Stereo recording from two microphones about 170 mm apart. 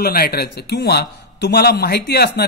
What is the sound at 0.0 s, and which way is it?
A man's voice, 65° left (ahead or behind).